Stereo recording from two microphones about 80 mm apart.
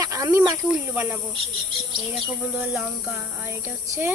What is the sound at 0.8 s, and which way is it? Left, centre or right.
Speech, right.